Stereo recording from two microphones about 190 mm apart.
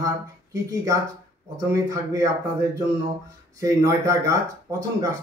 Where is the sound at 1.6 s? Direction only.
15° right (ahead or behind).